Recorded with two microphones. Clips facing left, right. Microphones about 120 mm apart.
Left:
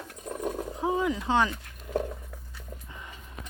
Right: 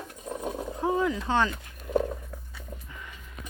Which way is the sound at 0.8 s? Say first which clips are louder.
Right 2 dB; 15° left (ahead or behind).